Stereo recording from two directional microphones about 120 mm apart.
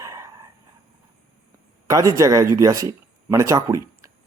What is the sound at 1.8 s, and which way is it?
Speech, 30° right (ahead or behind).